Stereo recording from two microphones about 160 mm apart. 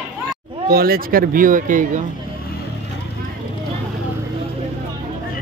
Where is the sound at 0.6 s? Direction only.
70° right (ahead or behind).